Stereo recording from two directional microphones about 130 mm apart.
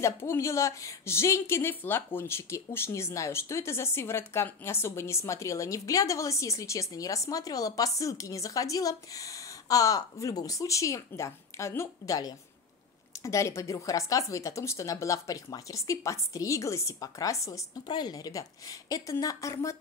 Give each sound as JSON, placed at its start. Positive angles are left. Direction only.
{"t": 0.0, "sound": "speech", "side_deg": 20}